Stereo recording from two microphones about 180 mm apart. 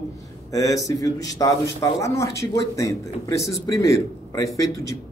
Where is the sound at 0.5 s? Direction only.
20° left (ahead or behind).